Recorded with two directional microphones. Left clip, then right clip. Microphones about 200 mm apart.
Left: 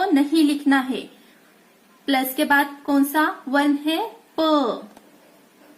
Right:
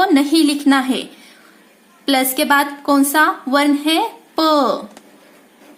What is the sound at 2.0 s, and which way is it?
Speech, 20° right (ahead or behind).